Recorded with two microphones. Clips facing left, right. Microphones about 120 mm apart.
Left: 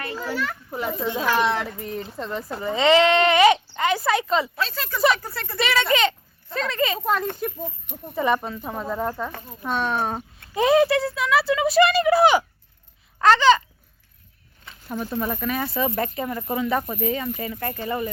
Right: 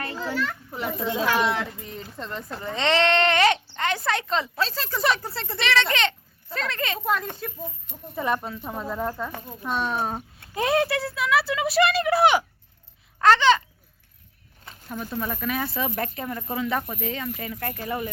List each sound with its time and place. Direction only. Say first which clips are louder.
0.2 s speech: right 1 dB; 5° left (ahead or behind)
4.5 s speech: even; 35° right (ahead or behind)
5.5 s a child's voice: left 3 dB; 5° left (ahead or behind)
9.0 s speech: left 1 dB; 15° left (ahead or behind)
9.5 s speech: left 2 dB; centre (ahead or behind)
13.1 s babbling: left 2 dB; centre (ahead or behind)
15.1 s speech: left 2 dB; 5° left (ahead or behind)